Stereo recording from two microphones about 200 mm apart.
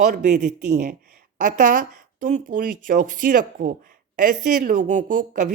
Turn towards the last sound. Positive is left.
turn(degrees=-40)  # may be behind; listen again after turning